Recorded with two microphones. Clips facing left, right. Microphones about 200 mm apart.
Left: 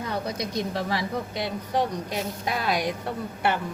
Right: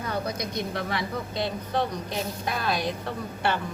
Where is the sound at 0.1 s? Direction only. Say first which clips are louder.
Right 1 dB; 25° left (ahead or behind).